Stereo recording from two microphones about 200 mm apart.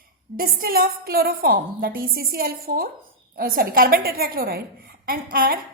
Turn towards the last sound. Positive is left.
turn(degrees=-45)  # may be behind; listen again after turning